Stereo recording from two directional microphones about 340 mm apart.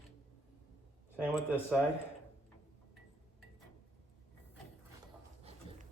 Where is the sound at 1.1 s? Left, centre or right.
Centre.